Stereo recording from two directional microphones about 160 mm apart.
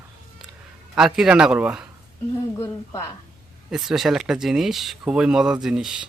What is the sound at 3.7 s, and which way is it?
Speech, 5° right (ahead or behind).